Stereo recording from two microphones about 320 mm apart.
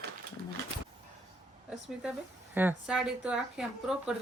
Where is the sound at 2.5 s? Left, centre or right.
Centre.